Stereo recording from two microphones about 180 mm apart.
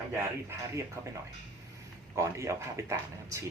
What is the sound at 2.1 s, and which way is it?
Speech, 15° right (ahead or behind).